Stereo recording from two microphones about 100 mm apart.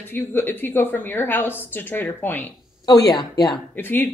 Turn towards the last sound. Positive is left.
turn(degrees=20)  # may be behind; listen again after turning